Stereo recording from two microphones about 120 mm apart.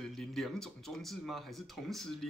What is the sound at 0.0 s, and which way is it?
Speech, centre (ahead or behind).